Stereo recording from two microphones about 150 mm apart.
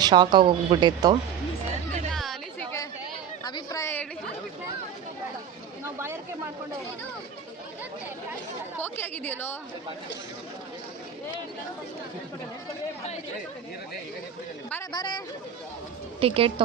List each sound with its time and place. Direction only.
0.0 s speech: 30° right (ahead or behind)
2.1 s music: centre (ahead or behind)
3.4 s chatter: 25° left (ahead or behind)
5.8 s a sound: 15° right (ahead or behind)
8.8 s a woman's voice: 15° left (ahead or behind)
14.9 s speech: 30° left (ahead or behind)
16.2 s a woman's voice: 40° right (ahead or behind)